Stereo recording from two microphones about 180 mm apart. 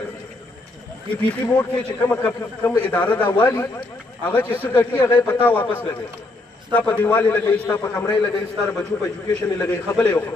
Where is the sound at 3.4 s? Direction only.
20° left (ahead or behind).